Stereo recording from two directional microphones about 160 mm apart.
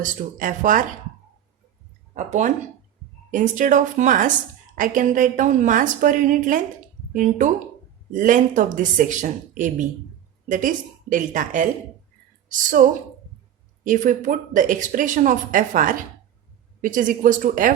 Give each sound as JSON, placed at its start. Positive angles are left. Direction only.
{"t": 0.0, "sound": "speech", "side_deg": -55}
{"t": 2.1, "sound": "speech", "side_deg": -50}
{"t": 13.8, "sound": "speech", "side_deg": -55}